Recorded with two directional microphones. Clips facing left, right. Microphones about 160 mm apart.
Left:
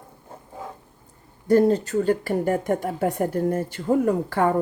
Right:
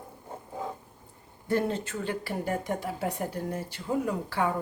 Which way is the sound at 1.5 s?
40° left (ahead or behind).